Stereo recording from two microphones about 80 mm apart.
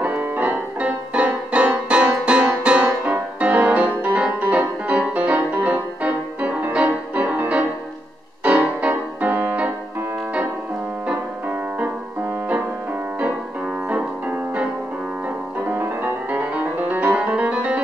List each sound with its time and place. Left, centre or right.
0.0 s music: right
11.1 s music: right
15.7 s music: right